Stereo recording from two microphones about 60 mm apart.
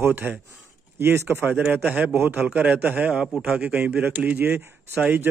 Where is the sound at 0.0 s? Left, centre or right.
Right.